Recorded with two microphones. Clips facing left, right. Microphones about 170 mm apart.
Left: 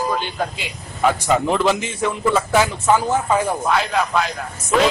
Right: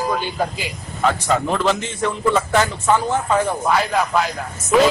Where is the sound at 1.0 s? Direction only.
10° left (ahead or behind).